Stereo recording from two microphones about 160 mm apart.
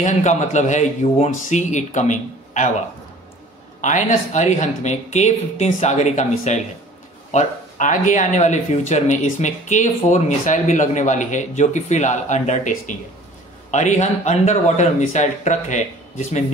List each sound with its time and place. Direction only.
0.0 s speech: 50° left (ahead or behind)
3.8 s speech: 50° left (ahead or behind)